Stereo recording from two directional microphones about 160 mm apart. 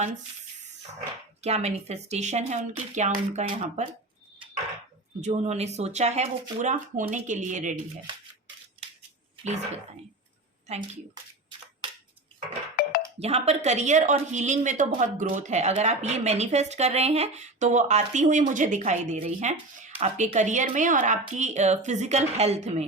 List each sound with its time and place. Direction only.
1.4 s a woman's voice: 40° right (ahead or behind)
5.2 s a woman's voice: 45° right (ahead or behind)
12.8 s music: 70° left (ahead or behind)
13.1 s a woman's voice: 40° right (ahead or behind)